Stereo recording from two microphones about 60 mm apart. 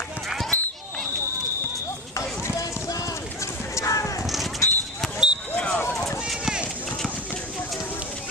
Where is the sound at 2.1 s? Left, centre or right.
Left.